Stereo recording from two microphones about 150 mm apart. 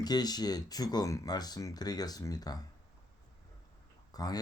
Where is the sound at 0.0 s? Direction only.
25° left (ahead or behind).